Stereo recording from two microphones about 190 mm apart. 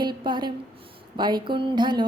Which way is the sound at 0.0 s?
25° right (ahead or behind).